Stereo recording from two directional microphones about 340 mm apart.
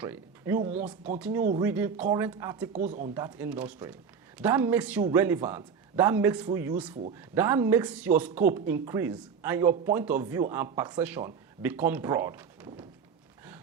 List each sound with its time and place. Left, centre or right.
0.0 s speech: centre
2.7 s speech: right
3.2 s a man's voice: centre